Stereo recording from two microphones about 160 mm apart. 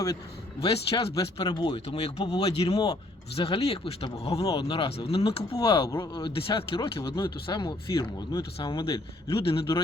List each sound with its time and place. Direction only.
0.9 s speech: 25° left (ahead or behind)
2.7 s speech: 25° left (ahead or behind)
3.3 s speech: 35° left (ahead or behind)